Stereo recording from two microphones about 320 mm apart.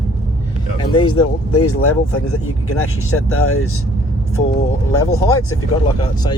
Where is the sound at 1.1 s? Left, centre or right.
Left.